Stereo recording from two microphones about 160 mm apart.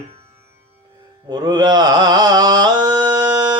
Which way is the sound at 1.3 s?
25° right (ahead or behind).